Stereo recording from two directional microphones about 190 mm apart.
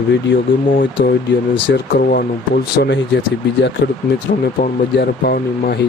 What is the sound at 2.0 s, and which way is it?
Speech, 50° left (ahead or behind).